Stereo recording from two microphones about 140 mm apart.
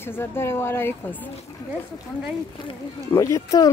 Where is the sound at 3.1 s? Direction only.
20° left (ahead or behind).